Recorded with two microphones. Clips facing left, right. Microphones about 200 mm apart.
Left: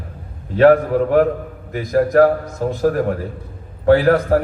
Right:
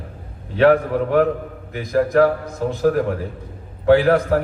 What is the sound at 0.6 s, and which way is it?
A man's voice, 45° left (ahead or behind).